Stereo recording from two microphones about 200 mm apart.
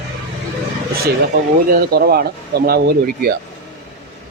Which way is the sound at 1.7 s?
50° right (ahead or behind).